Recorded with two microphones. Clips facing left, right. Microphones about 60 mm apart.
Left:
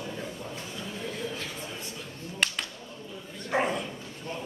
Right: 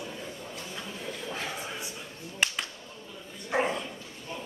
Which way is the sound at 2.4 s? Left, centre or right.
Centre.